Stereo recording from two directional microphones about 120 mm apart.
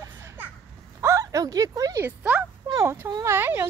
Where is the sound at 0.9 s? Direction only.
25° right (ahead or behind).